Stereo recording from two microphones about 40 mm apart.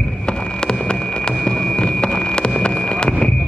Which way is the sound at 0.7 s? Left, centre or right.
Left.